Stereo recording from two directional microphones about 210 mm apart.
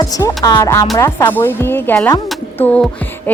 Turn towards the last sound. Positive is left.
turn(degrees=5)  # may be behind; listen again after turning